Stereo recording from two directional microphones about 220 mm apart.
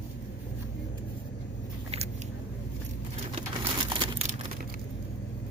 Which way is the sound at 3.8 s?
25° right (ahead or behind).